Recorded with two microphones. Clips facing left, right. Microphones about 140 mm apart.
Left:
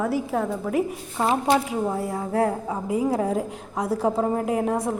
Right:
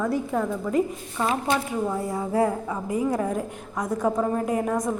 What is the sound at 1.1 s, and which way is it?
Speech, 25° left (ahead or behind).